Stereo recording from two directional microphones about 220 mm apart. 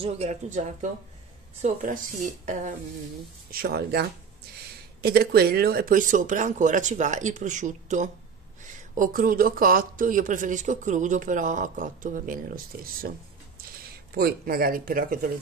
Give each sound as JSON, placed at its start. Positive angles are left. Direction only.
{"t": 0.0, "sound": "speech", "side_deg": -30}
{"t": 14.1, "sound": "speech", "side_deg": -45}